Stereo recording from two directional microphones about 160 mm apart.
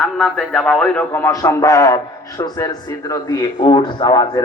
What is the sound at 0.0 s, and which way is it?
A man's voice, 5° left (ahead or behind).